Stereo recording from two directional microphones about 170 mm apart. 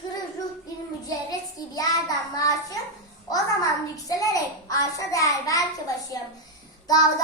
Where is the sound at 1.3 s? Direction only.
20° left (ahead or behind).